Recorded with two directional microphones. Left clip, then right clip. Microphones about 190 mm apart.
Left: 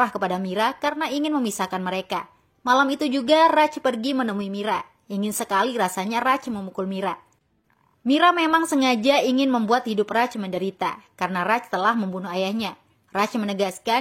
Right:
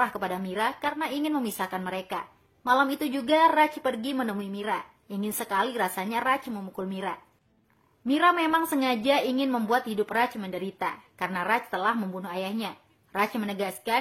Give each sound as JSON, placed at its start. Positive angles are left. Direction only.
{"t": 0.0, "sound": "a woman's voice", "side_deg": 30}